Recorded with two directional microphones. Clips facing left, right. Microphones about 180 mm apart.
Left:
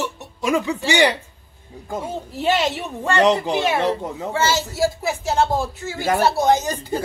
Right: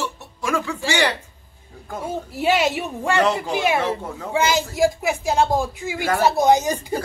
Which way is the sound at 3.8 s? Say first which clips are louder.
Left 3 dB; 20° left (ahead or behind).